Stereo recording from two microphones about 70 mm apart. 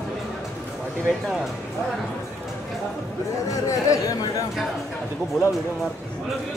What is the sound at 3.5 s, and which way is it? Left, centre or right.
Speech, left.